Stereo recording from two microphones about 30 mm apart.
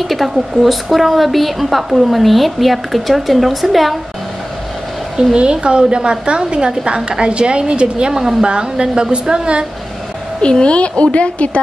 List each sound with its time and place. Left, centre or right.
0.0 s a woman's voice: centre
5.4 s a woman's voice: right
8.1 s speech: centre
8.5 s a woman's voice: right
10.6 s a woman's voice: left